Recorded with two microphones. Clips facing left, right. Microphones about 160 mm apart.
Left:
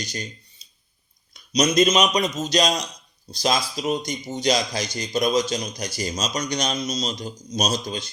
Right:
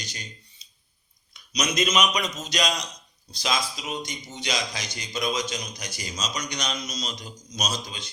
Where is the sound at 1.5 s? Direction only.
35° left (ahead or behind).